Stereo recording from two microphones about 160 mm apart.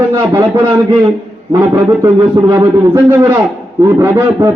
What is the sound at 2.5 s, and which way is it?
A man's voice, 25° right (ahead or behind).